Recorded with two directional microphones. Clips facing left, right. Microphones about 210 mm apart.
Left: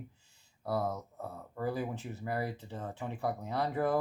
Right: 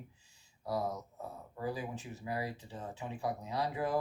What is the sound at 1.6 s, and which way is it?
Speech, 55° left (ahead or behind).